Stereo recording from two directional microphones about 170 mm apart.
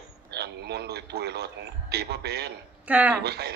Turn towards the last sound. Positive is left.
turn(degrees=-70)  # may be behind; listen again after turning